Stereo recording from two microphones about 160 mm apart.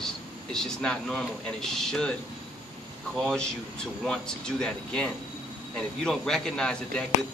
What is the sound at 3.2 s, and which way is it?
Speech, 5° left (ahead or behind).